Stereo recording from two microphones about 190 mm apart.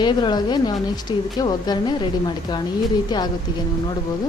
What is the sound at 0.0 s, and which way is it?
A woman's voice, 20° left (ahead or behind).